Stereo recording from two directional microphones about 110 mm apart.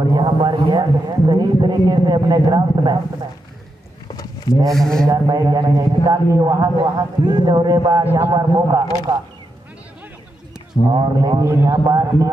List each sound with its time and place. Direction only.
0.1 s a sound: 40° right (ahead or behind)
4.1 s a sound: 35° left (ahead or behind)
4.6 s speech: 5° left (ahead or behind)
5.0 s a man's voice: 30° right (ahead or behind)
6.8 s a man's voice: 40° right (ahead or behind)
8.0 s a man's voice: 20° right (ahead or behind)
8.3 s a man's voice: 35° right (ahead or behind)
10.9 s a man's voice: 40° right (ahead or behind)
11.4 s a man's voice: 25° right (ahead or behind)